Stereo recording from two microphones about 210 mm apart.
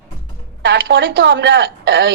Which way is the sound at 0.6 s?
60° right (ahead or behind).